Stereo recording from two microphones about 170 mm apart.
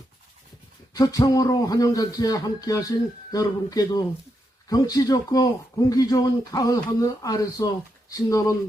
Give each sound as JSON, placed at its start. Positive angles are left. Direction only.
{"t": 0.9, "sound": "a man's voice", "side_deg": 20}